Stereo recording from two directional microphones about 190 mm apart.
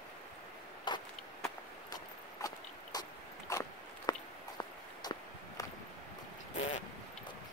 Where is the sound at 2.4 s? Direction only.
20° left (ahead or behind).